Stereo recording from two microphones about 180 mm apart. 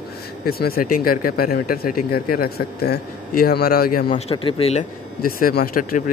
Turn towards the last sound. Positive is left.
turn(degrees=50)  # may be behind; listen again after turning